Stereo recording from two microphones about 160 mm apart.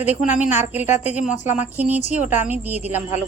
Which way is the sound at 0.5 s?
10° right (ahead or behind).